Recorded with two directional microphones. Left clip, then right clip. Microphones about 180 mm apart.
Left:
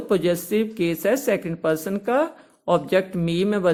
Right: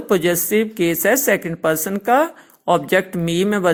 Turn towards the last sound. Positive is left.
turn(degrees=-25)  # may be behind; listen again after turning